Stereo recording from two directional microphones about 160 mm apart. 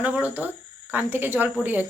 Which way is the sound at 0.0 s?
10° right (ahead or behind).